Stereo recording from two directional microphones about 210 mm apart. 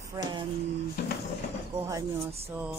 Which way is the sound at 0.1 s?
20° right (ahead or behind).